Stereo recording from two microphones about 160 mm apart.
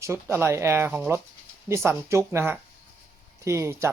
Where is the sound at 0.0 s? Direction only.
15° right (ahead or behind).